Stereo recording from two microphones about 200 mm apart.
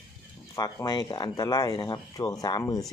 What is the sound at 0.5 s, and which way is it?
Speech, 20° left (ahead or behind).